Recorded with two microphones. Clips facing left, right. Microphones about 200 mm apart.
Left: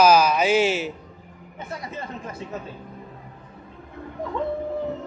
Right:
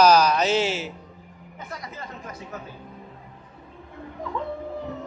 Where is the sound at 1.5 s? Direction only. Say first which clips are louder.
Left 4 dB; 25° left (ahead or behind).